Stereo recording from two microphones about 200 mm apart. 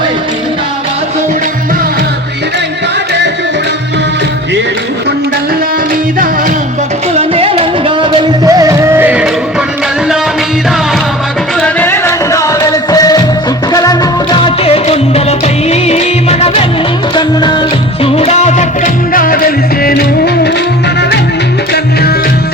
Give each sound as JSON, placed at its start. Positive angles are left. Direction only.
{"t": 7.2, "sound": "a sound", "side_deg": -30}
{"t": 8.4, "sound": "music", "side_deg": -15}
{"t": 11.6, "sound": "music", "side_deg": 10}
{"t": 19.1, "sound": "music", "side_deg": 45}